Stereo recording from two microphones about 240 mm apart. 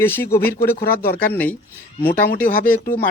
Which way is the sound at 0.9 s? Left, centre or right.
Left.